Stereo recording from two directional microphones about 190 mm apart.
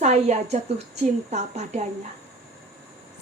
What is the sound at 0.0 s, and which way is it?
Speech, 35° right (ahead or behind).